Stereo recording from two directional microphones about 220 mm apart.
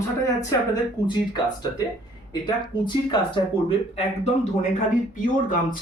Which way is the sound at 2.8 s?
20° left (ahead or behind).